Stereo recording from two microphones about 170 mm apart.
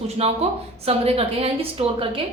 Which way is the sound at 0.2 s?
35° right (ahead or behind).